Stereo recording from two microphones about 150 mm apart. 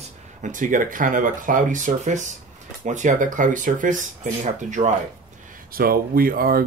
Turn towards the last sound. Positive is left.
turn(degrees=-75)  # may be behind; listen again after turning